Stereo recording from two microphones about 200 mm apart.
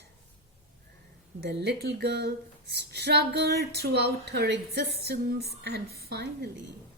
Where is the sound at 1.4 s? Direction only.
55° right (ahead or behind).